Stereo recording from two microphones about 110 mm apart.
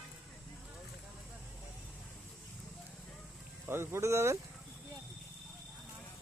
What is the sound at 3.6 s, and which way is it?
Speech, 20° right (ahead or behind).